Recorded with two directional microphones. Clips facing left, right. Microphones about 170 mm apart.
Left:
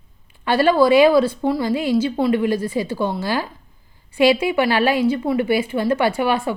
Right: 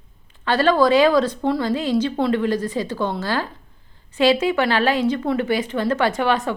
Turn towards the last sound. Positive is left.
turn(degrees=10)  # may be behind; listen again after turning